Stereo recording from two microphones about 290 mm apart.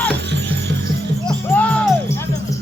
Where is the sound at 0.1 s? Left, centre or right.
Right.